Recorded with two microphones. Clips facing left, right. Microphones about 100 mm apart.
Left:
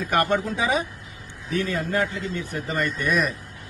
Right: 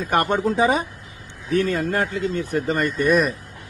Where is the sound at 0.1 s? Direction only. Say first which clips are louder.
Right 3 dB; 45° right (ahead or behind).